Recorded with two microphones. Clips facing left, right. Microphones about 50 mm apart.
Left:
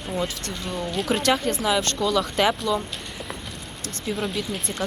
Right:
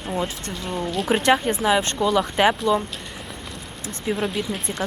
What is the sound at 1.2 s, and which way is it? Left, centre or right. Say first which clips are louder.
Speech: right 4 dB; right.